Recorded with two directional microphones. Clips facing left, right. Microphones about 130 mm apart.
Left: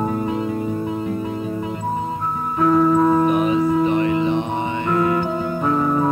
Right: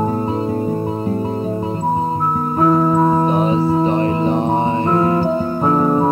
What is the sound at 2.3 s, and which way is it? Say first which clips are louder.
Music: right 1 dB; 35° right (ahead or behind).